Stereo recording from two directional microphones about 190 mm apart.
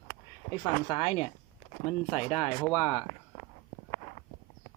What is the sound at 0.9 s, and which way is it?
Speech, 30° left (ahead or behind).